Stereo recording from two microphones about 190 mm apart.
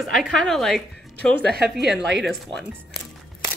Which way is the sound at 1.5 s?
55° right (ahead or behind).